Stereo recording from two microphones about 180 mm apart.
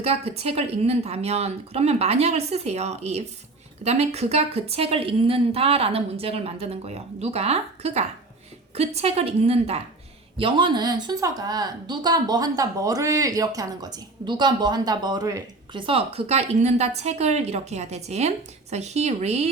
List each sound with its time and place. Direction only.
0.0 s a woman's voice: 35° right (ahead or behind)